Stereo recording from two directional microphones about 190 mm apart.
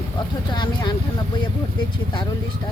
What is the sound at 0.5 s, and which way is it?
Speech, 25° left (ahead or behind).